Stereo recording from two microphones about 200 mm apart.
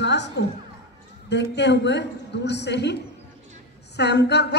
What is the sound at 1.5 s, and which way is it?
A man's voice, 60° left (ahead or behind).